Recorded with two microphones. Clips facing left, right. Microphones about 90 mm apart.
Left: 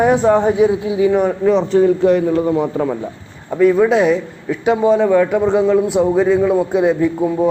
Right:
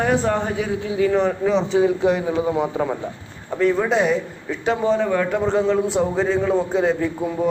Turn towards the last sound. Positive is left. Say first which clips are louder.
# left 6 dB
turn(degrees=20)  # may be behind; listen again after turning